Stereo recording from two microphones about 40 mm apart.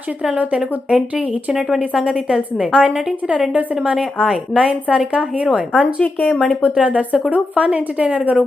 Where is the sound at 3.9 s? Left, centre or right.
Centre.